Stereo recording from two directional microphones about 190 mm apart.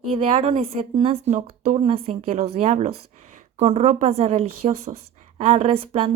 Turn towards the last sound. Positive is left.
turn(degrees=-30)  # may be behind; listen again after turning